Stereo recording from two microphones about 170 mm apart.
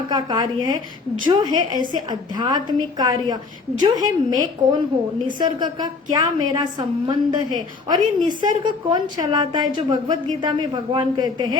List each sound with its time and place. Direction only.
0.1 s a woman's voice: 25° right (ahead or behind)